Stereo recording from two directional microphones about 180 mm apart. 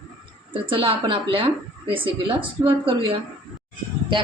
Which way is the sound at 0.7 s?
30° right (ahead or behind).